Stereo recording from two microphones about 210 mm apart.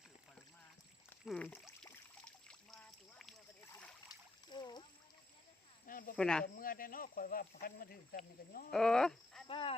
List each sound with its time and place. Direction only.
1.2 s pour: 5° left (ahead or behind)
4.1 s splash: 20° left (ahead or behind)
5.8 s snake: 40° left (ahead or behind)
6.1 s speech: 5° left (ahead or behind)
6.4 s speech: 40° left (ahead or behind)
8.7 s speech: 5° left (ahead or behind)
9.5 s speech: 25° left (ahead or behind)